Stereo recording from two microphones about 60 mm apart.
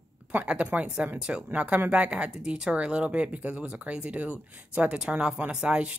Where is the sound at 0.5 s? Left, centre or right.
Right.